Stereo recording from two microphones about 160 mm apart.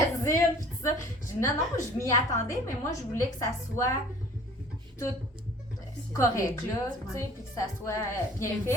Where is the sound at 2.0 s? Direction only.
20° left (ahead or behind).